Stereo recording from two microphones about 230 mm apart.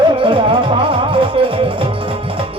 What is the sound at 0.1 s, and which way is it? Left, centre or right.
Music, right.